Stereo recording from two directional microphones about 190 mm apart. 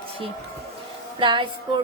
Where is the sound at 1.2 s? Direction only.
25° right (ahead or behind).